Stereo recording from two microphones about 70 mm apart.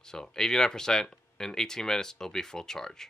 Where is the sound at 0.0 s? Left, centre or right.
Centre.